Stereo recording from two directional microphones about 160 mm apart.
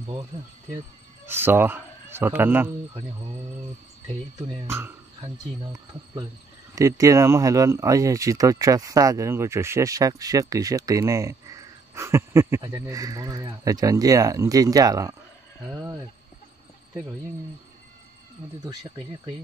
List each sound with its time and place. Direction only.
1.2 s a man's voice: 15° right (ahead or behind)
4.6 s speech: 15° right (ahead or behind)
6.7 s speech: 20° right (ahead or behind)